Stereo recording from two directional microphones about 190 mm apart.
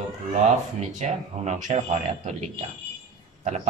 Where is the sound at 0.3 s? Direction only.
40° right (ahead or behind).